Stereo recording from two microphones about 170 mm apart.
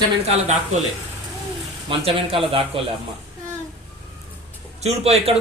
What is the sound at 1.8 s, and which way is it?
Speech, 35° right (ahead or behind).